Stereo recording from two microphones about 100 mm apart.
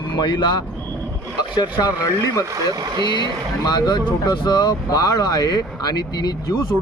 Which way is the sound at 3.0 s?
45° left (ahead or behind).